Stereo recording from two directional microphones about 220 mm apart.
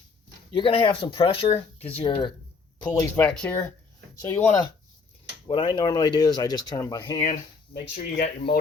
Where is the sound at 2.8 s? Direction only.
10° left (ahead or behind).